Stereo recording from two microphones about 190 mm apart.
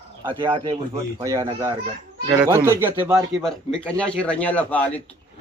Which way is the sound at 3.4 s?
5° left (ahead or behind).